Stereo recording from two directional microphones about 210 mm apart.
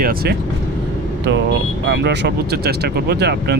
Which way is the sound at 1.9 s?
55° right (ahead or behind).